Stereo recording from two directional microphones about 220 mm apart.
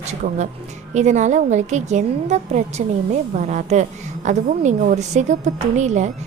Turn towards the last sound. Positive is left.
turn(degrees=-30)  # may be behind; listen again after turning